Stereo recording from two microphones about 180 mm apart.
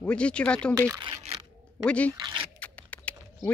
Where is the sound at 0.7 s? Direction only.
15° right (ahead or behind).